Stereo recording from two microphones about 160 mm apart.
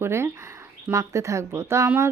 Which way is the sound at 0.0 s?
15° right (ahead or behind).